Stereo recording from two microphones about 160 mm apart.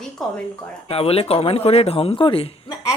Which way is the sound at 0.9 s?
35° left (ahead or behind).